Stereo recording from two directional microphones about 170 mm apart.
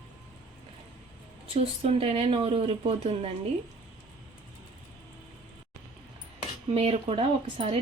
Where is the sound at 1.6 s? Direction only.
35° right (ahead or behind).